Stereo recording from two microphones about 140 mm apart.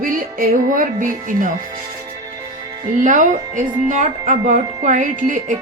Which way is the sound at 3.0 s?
65° right (ahead or behind).